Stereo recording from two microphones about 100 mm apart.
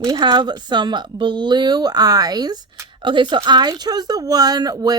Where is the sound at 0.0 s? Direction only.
50° right (ahead or behind).